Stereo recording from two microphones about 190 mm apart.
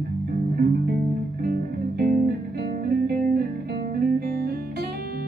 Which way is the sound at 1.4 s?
50° right (ahead or behind).